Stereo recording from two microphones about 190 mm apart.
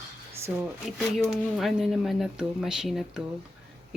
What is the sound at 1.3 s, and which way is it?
Speech, centre (ahead or behind).